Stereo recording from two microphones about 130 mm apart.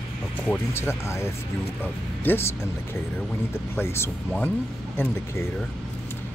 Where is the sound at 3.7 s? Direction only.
20° left (ahead or behind).